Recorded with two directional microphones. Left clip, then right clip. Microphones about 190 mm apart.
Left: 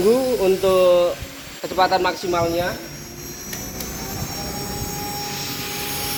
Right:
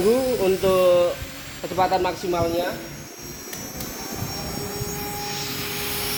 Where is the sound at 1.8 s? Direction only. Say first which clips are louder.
Left 3 dB; 15° right (ahead or behind).